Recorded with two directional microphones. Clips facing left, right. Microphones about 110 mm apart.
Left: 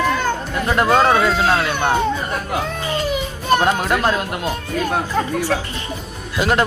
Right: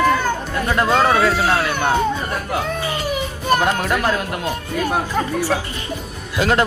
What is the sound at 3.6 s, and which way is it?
Speech, 20° left (ahead or behind).